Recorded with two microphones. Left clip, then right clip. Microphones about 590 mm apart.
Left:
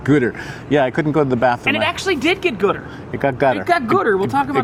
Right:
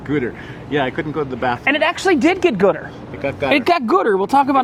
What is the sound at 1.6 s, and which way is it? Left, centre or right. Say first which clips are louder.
Speech: right 2 dB; right.